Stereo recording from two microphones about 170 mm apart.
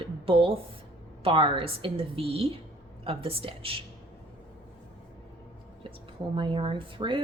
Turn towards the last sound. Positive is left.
turn(degrees=-30)  # may be behind; listen again after turning